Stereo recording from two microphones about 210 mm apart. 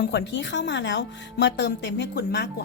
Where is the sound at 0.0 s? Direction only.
55° left (ahead or behind).